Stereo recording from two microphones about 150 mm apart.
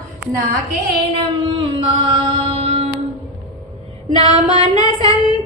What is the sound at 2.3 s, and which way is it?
Music, 40° right (ahead or behind).